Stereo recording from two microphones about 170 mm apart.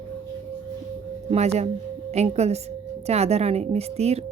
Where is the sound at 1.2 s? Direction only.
40° right (ahead or behind).